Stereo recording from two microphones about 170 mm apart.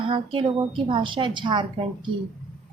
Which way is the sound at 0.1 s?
30° right (ahead or behind).